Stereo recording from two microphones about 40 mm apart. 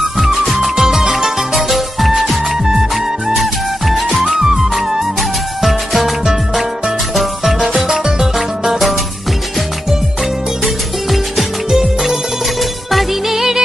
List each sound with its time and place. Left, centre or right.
0.2 s music: centre
11.1 s music: centre